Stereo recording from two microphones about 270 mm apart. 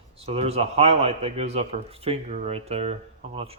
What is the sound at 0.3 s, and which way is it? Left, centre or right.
A man's voice, right.